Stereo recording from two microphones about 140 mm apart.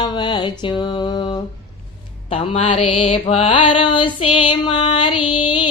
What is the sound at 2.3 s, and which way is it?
Music, 50° left (ahead or behind).